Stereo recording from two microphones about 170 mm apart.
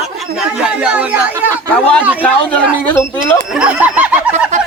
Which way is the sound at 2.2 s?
10° left (ahead or behind).